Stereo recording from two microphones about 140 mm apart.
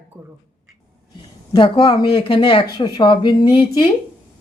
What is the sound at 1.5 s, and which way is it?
Speech, 35° left (ahead or behind).